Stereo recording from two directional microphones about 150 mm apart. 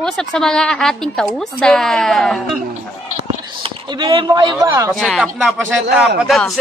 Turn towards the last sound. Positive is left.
turn(degrees=0)  # may be behind; listen again after turning